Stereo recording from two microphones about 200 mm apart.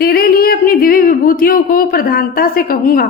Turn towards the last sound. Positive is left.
turn(degrees=45)  # may be behind; listen again after turning